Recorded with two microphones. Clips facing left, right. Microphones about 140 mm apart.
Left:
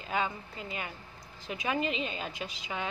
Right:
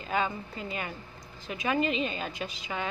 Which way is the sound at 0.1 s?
15° left (ahead or behind).